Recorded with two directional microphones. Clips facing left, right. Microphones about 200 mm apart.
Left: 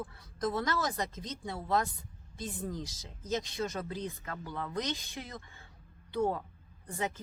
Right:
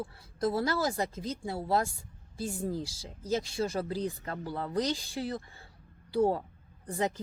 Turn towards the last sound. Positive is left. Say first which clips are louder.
# right 5 dB
turn(degrees=-35)  # may be behind; listen again after turning